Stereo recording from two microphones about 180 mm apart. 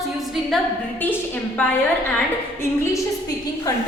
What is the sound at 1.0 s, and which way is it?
Speech, 10° left (ahead or behind).